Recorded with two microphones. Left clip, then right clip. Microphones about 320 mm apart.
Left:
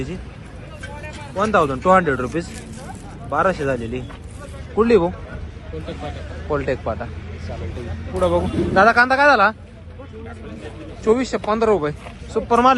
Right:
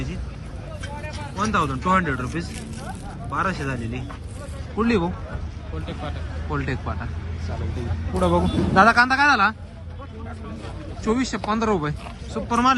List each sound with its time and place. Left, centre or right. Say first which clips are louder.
1.5 s speech: left 6 dB; centre
6.5 s speech: left 7 dB; centre
8.2 s speech: left 3 dB; centre
11.0 s speech: left 6 dB; centre